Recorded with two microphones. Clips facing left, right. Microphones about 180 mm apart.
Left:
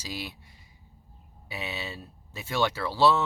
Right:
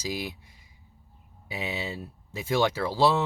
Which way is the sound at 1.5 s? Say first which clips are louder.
Right 3 dB; 15° right (ahead or behind).